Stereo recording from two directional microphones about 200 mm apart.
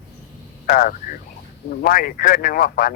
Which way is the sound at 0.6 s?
45° left (ahead or behind).